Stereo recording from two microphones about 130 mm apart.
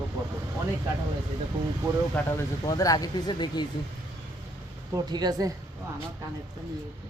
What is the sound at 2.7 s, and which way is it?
Speech, 25° left (ahead or behind).